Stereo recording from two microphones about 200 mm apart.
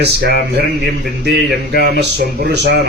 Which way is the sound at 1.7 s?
55° right (ahead or behind).